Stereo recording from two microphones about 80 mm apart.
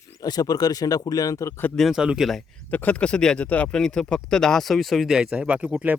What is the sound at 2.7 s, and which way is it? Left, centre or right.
Speech, left.